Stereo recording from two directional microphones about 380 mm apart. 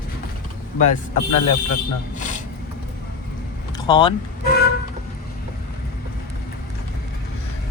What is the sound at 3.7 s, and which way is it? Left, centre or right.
Vehicle, centre.